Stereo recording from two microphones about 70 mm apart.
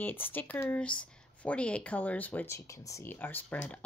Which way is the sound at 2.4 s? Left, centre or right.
Left.